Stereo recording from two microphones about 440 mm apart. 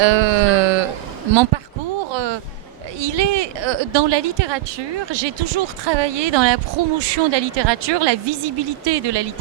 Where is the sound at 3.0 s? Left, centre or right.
Right.